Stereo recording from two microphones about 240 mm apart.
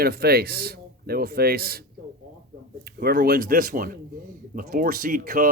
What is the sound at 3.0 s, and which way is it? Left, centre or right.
Speech, right.